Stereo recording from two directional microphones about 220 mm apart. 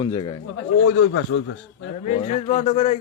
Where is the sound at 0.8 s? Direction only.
60° left (ahead or behind).